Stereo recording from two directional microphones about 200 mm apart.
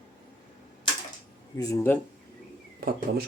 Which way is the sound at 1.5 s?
15° left (ahead or behind).